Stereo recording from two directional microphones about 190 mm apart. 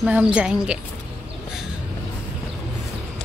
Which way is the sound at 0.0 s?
5° right (ahead or behind).